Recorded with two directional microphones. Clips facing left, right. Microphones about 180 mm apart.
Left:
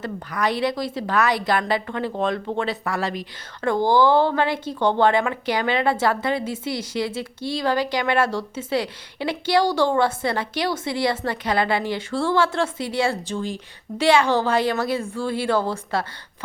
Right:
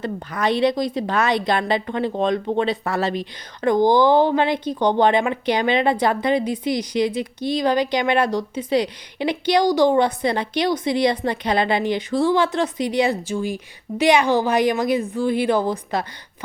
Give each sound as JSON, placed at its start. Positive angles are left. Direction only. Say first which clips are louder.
{"t": 0.0, "sound": "a woman's voice", "louder": "right 2 dB", "side_deg": -25}